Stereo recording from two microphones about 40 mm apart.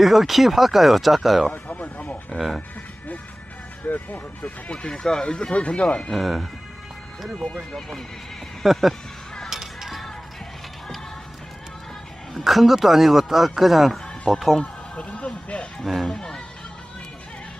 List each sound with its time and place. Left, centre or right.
0.0 s speech: centre
1.5 s a sound: left
2.3 s speech: centre
3.8 s speech: left
4.6 s speech: left
6.1 s speech: centre
8.6 s speech: centre
9.5 s music: centre
12.4 s speech: centre
14.6 s a sound: left
15.8 s speech: centre
16.1 s speech: centre